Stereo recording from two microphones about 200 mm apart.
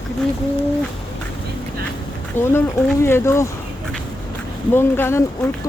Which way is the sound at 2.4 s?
10° left (ahead or behind).